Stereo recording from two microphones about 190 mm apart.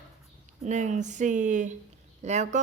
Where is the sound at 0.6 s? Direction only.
40° right (ahead or behind).